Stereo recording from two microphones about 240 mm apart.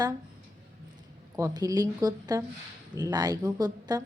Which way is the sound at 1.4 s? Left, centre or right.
Centre.